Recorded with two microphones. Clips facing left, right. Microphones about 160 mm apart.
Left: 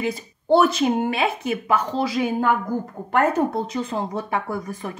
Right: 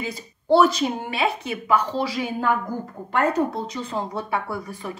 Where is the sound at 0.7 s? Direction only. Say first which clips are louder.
Left 4 dB; 50° left (ahead or behind).